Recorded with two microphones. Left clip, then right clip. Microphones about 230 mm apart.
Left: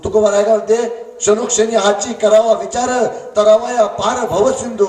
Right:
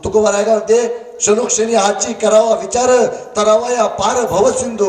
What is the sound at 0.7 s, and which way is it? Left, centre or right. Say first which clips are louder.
A man's voice: right 2 dB; right.